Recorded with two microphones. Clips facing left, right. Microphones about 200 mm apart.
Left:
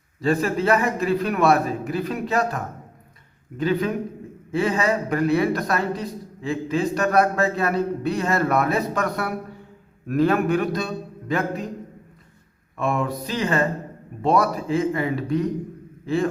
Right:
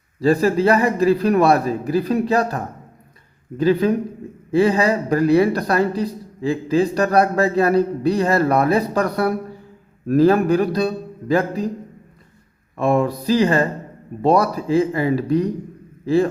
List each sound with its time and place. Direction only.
0.2 s speech: 35° right (ahead or behind)
12.7 s speech: 35° right (ahead or behind)